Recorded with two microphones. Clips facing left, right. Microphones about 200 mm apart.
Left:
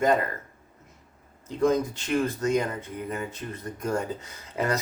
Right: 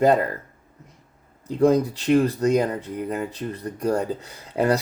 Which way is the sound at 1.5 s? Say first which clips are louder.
Right 5 dB; 35° right (ahead or behind).